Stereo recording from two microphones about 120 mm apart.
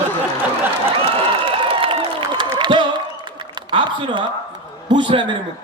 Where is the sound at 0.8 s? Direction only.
50° right (ahead or behind).